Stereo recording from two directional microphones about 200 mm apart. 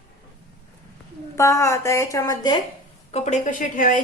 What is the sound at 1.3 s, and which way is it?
Speech, 15° left (ahead or behind).